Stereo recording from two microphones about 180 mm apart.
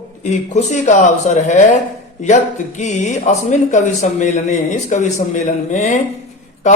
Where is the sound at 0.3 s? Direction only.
40° left (ahead or behind).